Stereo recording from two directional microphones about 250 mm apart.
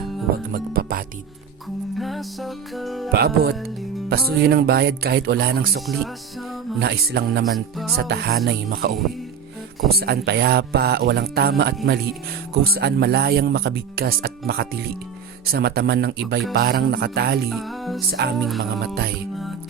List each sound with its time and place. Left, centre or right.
0.5 s speech: right
2.0 s music: centre
3.1 s speech: right
7.5 s music: centre
7.9 s speech: right
10.0 s speech: right
17.5 s music: centre
18.1 s speech: right
18.4 s music: centre